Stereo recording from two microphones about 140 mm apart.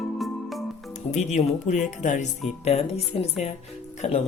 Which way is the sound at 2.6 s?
45° left (ahead or behind).